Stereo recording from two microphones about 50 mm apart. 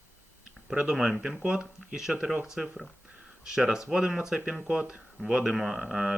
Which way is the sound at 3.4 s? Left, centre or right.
Centre.